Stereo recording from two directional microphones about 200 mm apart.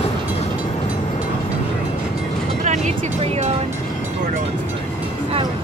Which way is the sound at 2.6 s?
35° right (ahead or behind).